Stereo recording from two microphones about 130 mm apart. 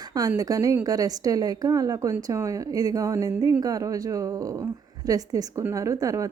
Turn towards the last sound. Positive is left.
turn(degrees=-25)  # may be behind; listen again after turning